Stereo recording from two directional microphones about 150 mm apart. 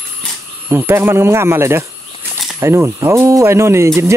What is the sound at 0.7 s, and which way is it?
Speech, 15° right (ahead or behind).